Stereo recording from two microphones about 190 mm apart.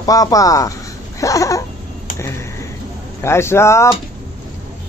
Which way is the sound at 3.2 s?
15° left (ahead or behind).